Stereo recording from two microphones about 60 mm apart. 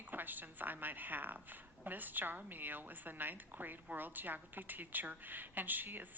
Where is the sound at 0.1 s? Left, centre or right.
Right.